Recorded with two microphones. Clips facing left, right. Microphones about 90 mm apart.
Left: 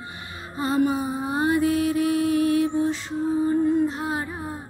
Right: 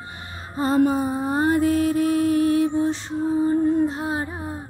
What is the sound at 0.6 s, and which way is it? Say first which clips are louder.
Music: right 3 dB; 40° right (ahead or behind).